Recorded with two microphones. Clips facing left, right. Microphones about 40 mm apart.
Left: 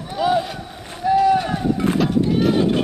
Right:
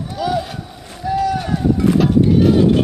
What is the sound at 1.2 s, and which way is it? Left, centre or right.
Run, left.